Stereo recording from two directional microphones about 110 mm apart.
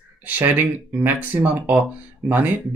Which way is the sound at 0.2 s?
15° right (ahead or behind).